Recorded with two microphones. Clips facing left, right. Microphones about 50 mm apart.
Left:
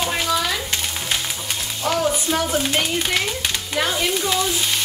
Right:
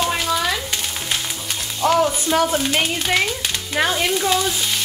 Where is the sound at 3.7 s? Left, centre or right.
Right.